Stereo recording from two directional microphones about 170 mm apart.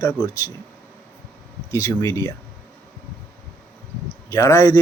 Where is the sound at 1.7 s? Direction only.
15° left (ahead or behind).